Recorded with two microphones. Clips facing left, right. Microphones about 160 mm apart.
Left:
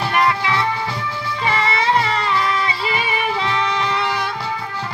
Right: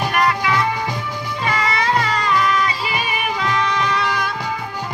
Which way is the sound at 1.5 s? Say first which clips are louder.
Left 1 dB; 20° left (ahead or behind).